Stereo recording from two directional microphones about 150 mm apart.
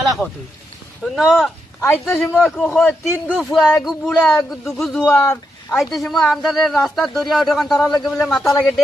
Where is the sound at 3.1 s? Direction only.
5° right (ahead or behind).